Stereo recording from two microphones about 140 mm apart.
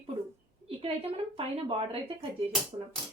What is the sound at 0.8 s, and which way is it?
A woman's voice, 40° right (ahead or behind).